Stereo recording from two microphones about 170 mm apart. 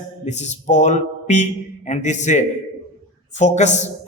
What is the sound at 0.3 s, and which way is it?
A man's voice, 45° left (ahead or behind).